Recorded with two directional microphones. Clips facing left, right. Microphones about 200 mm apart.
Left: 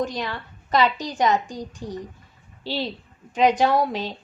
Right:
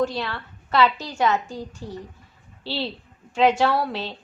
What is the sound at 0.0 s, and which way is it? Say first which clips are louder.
A woman's voice: right 2 dB; 15° left (ahead or behind).